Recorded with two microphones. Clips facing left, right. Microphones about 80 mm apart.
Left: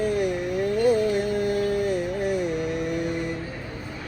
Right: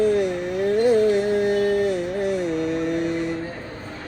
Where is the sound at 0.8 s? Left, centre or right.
Left.